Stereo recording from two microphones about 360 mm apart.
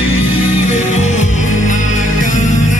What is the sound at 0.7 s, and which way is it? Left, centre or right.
Music, centre.